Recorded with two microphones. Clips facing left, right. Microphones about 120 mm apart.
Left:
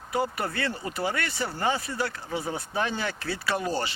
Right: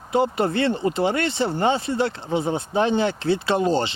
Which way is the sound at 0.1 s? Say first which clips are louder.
Right 8 dB; 25° right (ahead or behind).